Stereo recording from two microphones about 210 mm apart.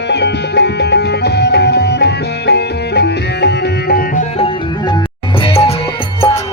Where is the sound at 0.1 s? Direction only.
55° left (ahead or behind).